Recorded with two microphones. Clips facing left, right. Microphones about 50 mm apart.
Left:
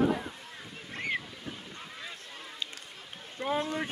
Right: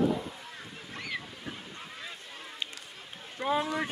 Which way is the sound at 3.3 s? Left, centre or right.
Centre.